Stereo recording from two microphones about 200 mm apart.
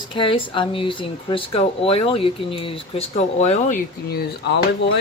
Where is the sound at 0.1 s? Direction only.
25° left (ahead or behind).